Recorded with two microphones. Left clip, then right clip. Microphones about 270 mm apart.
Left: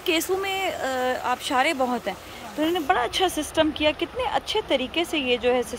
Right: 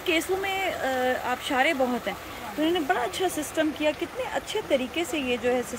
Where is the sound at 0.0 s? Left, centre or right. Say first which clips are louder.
Left 2 dB; centre.